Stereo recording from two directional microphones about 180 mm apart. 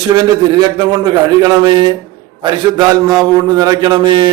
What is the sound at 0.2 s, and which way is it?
A man's voice, 25° right (ahead or behind).